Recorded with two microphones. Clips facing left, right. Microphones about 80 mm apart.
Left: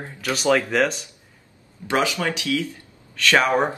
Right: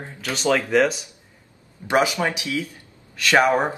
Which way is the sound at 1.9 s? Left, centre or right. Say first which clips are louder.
Right 2 dB; right.